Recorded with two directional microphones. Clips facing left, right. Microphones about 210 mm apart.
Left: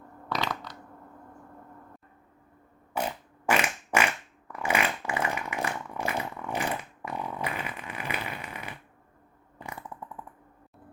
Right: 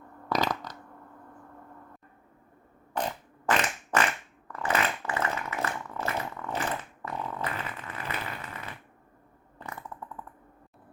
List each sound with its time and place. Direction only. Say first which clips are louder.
0.3 s crushing: right 4 dB; 45° right (ahead or behind)
2.9 s fart: even; 10° left (ahead or behind)
4.5 s a sound: left 1 dB; 10° left (ahead or behind)
9.6 s chainsaw: left 1 dB; 15° left (ahead or behind)